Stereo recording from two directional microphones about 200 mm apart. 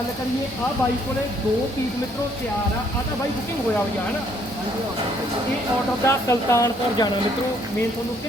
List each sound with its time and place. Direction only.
6.1 s speech: 15° left (ahead or behind)